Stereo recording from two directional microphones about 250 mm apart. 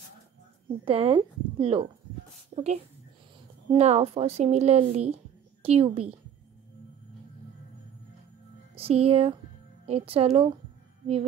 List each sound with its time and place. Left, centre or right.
0.8 s a woman's voice: right
8.7 s a woman's voice: right